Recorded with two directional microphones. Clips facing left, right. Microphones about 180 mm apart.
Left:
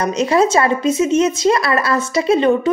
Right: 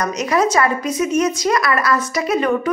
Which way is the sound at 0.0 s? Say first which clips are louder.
Left 3 dB; 25° left (ahead or behind).